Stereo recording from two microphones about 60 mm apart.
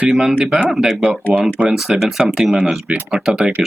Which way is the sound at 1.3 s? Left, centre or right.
Centre.